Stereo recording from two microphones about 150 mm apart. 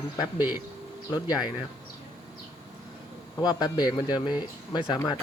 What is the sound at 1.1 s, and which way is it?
Speech, 25° left (ahead or behind).